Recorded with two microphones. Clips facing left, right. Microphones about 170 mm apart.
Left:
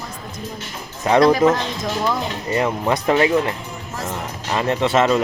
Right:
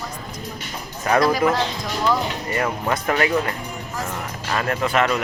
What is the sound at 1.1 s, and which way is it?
Speech, 20° left (ahead or behind).